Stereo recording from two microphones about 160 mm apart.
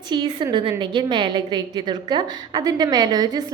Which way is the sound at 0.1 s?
30° right (ahead or behind).